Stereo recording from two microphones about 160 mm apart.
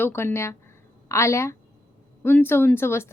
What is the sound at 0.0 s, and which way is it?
Speech, 15° left (ahead or behind).